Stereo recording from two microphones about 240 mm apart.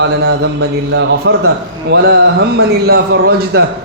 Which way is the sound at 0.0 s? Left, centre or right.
Right.